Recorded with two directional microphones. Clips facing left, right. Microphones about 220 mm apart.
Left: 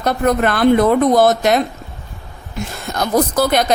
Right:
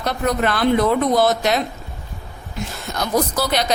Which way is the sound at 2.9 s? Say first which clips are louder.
Left 4 dB; 50° left (ahead or behind).